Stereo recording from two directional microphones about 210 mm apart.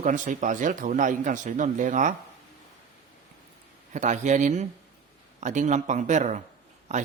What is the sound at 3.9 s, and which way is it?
A man's voice, 35° right (ahead or behind).